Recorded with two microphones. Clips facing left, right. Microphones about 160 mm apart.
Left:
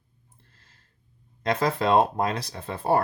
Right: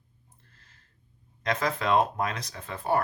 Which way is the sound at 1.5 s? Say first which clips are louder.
Left 4 dB; 30° left (ahead or behind).